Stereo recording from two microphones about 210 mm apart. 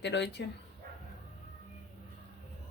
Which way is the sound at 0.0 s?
55° left (ahead or behind).